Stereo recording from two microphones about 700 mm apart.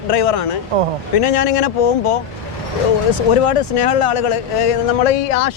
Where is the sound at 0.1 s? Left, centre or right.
Left.